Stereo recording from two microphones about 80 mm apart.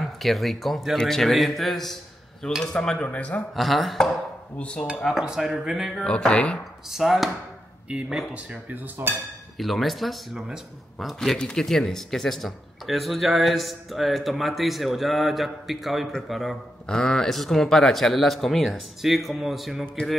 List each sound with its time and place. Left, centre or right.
0.0 s speech: centre
3.5 s speech: centre
4.6 s speech: centre
5.2 s speech: centre
6.0 s speech: centre
6.9 s speech: centre
8.5 s speech: right
9.6 s speech: centre